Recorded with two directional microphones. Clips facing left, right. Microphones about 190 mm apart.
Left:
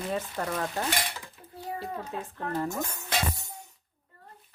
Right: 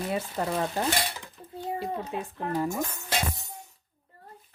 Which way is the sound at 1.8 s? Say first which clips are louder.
Right 2 dB; 15° right (ahead or behind).